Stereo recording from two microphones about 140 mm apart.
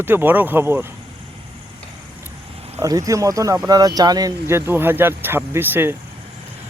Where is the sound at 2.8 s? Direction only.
25° right (ahead or behind).